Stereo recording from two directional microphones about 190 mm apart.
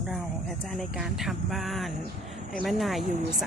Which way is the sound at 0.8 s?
Centre (ahead or behind).